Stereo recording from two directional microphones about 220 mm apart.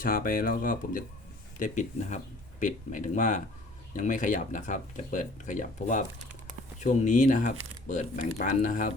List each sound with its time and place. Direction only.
0.0 s speech: 40° left (ahead or behind)